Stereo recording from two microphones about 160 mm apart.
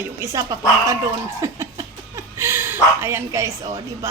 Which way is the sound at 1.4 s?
20° right (ahead or behind).